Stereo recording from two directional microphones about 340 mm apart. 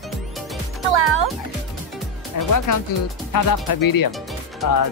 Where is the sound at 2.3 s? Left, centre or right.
Left.